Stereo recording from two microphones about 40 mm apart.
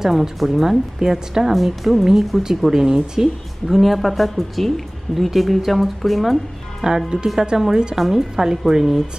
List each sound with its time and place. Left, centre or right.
0.0 s a woman's voice: centre
6.8 s speech: centre